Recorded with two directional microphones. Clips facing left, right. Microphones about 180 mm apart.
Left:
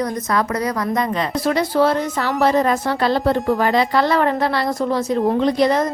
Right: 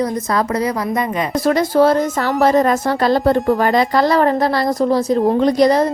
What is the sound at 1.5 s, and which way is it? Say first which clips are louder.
A woman's voice: right 4 dB; 45° right (ahead or behind).